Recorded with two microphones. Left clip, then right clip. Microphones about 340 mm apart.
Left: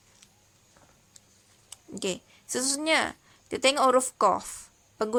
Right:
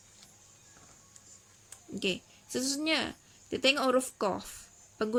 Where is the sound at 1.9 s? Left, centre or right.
Centre.